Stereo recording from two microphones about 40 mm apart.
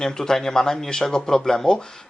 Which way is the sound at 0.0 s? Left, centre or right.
Centre.